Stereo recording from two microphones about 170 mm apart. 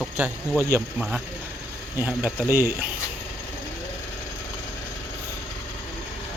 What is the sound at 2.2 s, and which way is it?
Speech, 10° right (ahead or behind).